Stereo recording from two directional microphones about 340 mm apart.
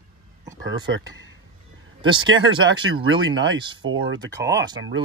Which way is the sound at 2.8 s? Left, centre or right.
Right.